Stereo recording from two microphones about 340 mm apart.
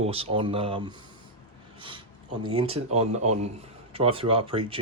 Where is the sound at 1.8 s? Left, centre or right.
Centre.